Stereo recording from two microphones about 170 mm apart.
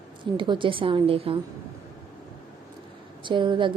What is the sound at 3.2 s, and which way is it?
Speech, 30° right (ahead or behind).